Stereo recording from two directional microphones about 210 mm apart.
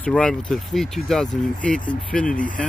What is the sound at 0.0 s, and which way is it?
Speech, 5° left (ahead or behind).